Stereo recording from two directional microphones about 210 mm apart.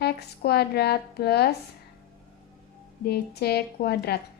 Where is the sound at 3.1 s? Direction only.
50° left (ahead or behind).